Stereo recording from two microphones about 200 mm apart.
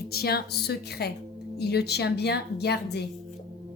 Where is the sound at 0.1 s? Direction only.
50° left (ahead or behind).